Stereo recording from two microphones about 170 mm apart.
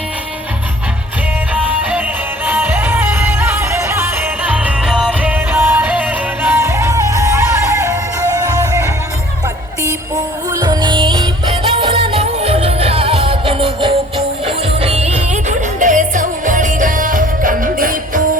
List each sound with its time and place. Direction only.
1.5 s music: 10° right (ahead or behind)
10.6 s music: 25° right (ahead or behind); by 18.2 s 55° right (ahead or behind)